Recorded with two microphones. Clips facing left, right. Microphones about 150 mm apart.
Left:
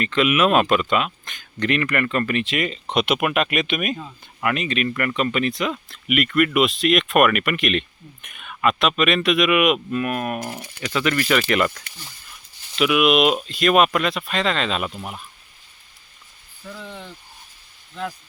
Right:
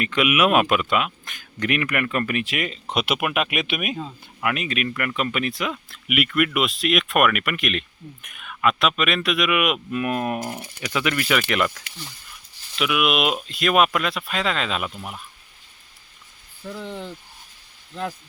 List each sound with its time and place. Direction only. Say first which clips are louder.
0.0 s speech: left 1 dB; 10° right (ahead or behind)
9.9 s speech: even; 20° right (ahead or behind)
10.6 s speech: left 2 dB; 10° right (ahead or behind)
16.7 s speech: right 4 dB; 25° right (ahead or behind)